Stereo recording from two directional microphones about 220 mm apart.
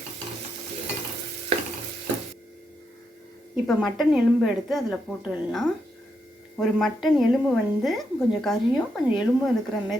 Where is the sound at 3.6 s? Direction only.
Centre (ahead or behind).